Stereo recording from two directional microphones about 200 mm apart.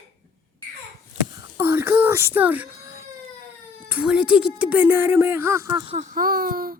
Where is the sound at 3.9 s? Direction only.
5° right (ahead or behind).